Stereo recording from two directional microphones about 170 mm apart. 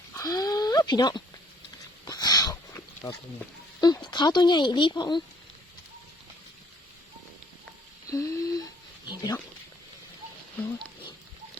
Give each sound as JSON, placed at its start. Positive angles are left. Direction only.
{"t": 0.1, "sound": "a sound", "side_deg": 20}
{"t": 2.0, "sound": "sniff", "side_deg": 25}
{"t": 3.8, "sound": "speech", "side_deg": 25}
{"t": 8.1, "sound": "speech", "side_deg": 20}